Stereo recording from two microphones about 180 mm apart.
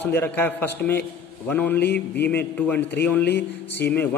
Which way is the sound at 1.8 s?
70° left (ahead or behind).